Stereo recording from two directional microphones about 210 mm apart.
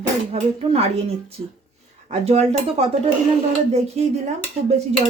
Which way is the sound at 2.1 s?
30° right (ahead or behind).